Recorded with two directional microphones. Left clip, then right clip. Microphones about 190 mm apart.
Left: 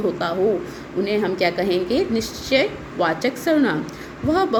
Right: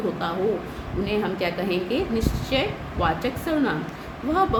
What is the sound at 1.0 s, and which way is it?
A woman's voice, 30° left (ahead or behind).